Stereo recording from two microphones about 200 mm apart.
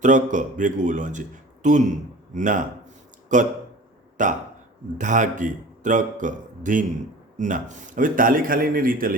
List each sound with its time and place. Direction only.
0.0 s a man's voice: 40° right (ahead or behind)